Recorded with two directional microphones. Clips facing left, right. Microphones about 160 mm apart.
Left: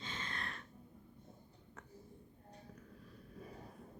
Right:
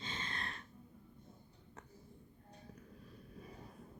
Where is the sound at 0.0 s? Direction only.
25° right (ahead or behind).